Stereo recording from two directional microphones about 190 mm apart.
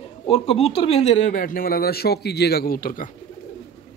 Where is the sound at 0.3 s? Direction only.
30° left (ahead or behind); by 3.1 s 50° left (ahead or behind).